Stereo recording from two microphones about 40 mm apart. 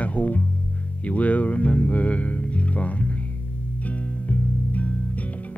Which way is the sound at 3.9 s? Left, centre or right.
Left.